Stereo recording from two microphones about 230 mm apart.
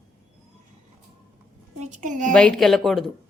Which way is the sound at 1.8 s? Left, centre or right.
Right.